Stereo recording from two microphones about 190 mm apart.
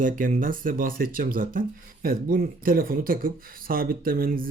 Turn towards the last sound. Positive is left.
turn(degrees=-50)  # may be behind; listen again after turning